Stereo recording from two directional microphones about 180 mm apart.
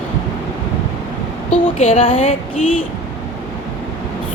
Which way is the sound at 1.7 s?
35° left (ahead or behind).